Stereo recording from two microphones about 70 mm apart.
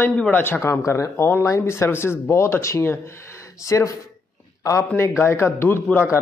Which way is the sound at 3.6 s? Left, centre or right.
Left.